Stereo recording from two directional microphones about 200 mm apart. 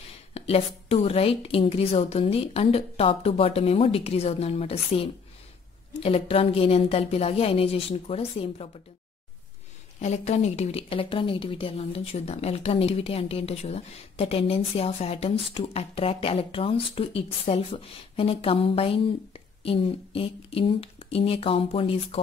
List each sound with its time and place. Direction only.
0.3 s speech: 30° left (ahead or behind)
9.9 s speech: 35° left (ahead or behind)